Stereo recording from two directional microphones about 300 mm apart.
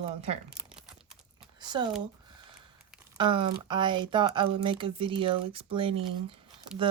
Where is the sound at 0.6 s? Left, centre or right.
Centre.